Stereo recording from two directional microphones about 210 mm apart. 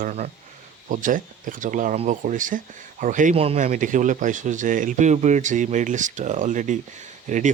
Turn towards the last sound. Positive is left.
turn(degrees=-35)  # may be behind; listen again after turning